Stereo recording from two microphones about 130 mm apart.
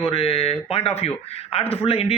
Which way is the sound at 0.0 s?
45° left (ahead or behind).